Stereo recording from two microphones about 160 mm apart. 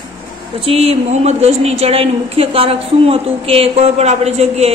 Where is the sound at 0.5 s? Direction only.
40° right (ahead or behind).